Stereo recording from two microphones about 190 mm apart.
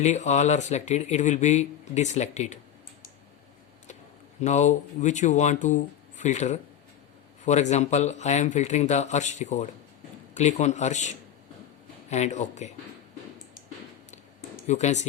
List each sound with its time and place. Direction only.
0.0 s speech: 35° left (ahead or behind)
4.4 s speech: 40° left (ahead or behind)
14.7 s speech: 40° left (ahead or behind)